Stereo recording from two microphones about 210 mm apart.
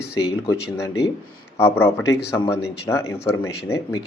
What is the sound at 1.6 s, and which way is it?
Speech, 10° left (ahead or behind).